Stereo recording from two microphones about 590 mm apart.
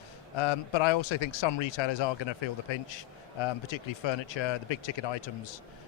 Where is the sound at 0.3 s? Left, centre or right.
Left.